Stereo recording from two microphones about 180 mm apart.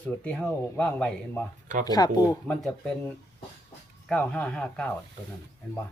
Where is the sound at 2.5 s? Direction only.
5° left (ahead or behind).